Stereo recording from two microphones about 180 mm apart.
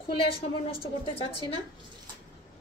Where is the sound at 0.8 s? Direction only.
30° left (ahead or behind).